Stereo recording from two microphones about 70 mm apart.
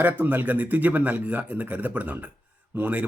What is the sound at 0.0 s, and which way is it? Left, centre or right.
Speech, right.